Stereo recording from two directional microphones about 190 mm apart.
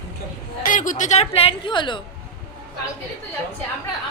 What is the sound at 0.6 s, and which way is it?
A woman's voice, 45° left (ahead or behind).